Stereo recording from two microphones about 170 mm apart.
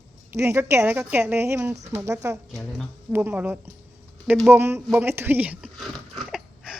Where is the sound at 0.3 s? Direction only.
15° right (ahead or behind).